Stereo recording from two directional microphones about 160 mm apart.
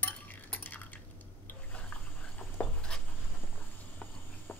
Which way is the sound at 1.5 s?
10° left (ahead or behind).